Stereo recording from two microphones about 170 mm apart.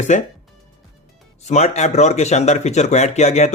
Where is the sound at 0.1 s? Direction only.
45° left (ahead or behind).